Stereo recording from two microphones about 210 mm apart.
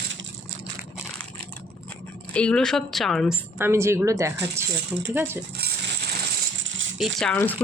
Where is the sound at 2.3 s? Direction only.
5° left (ahead or behind).